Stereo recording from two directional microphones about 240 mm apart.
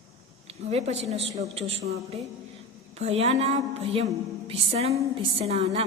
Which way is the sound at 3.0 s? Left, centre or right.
Right.